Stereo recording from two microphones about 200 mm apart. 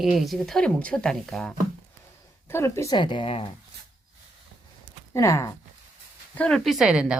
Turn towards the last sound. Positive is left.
turn(degrees=-5)  # may be behind; listen again after turning